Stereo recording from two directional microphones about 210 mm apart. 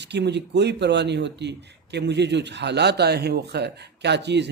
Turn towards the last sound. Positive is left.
turn(degrees=-55)  # may be behind; listen again after turning